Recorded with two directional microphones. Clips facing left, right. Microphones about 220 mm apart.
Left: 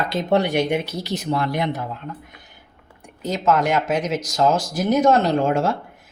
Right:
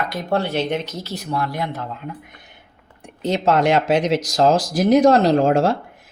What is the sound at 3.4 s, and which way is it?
Speech, 30° right (ahead or behind).